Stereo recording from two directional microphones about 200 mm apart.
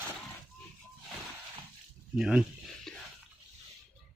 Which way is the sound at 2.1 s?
5° right (ahead or behind).